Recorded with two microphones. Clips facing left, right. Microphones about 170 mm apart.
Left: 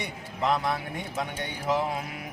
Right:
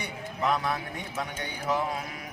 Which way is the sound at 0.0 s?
20° left (ahead or behind).